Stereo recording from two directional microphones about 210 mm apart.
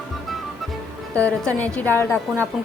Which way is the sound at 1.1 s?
5° left (ahead or behind).